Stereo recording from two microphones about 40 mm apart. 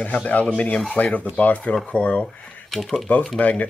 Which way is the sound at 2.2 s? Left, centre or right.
Centre.